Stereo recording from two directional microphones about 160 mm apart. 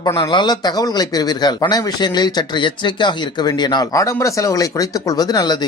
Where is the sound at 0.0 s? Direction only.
30° left (ahead or behind).